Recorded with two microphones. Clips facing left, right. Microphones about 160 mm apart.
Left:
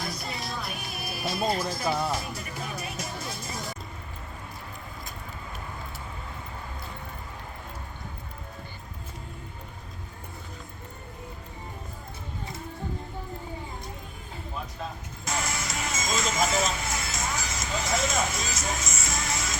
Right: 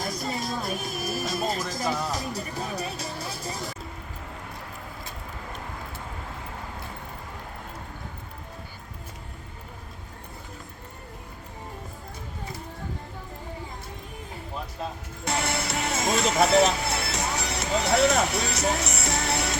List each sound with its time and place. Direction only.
0.0 s music: 45° right (ahead or behind)
15.2 s music: 65° right (ahead or behind)